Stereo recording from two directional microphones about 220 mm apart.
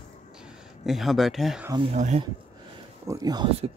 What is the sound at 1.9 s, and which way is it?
Speech, 30° right (ahead or behind).